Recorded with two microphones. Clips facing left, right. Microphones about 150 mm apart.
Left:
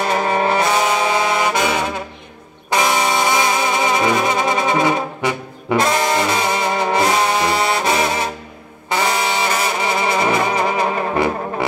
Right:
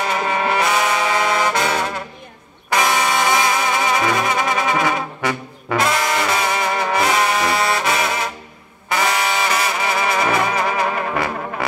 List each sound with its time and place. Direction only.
0.1 s trombone: 35° left (ahead or behind); by 1.9 s 15° left (ahead or behind)
2.7 s brass instrument: 20° left (ahead or behind)